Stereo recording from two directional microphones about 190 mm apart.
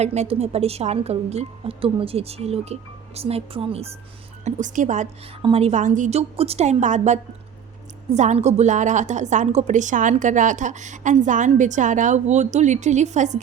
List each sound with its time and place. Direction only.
0.0 s a woman's voice: 35° right (ahead or behind)
4.4 s a woman's voice: 40° right (ahead or behind)
5.4 s a woman's voice: 30° right (ahead or behind)